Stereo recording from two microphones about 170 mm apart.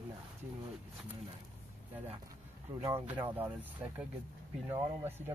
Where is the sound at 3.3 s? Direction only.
10° right (ahead or behind).